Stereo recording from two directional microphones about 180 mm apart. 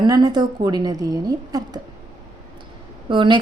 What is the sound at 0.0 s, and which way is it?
A woman's voice, 25° right (ahead or behind).